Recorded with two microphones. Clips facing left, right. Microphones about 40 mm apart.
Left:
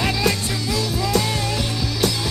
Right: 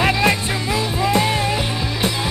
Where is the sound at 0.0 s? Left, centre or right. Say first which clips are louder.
Right 4 dB; right.